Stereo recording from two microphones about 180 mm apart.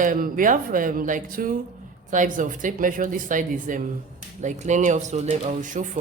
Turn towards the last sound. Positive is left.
turn(degrees=-45)  # may be behind; listen again after turning